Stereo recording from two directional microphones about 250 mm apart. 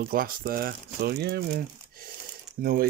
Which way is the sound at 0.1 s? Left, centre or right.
Right.